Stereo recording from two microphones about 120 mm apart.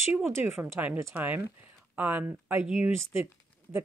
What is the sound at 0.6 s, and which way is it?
Speech, 20° right (ahead or behind).